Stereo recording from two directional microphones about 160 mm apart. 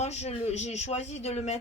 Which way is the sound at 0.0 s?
45° left (ahead or behind).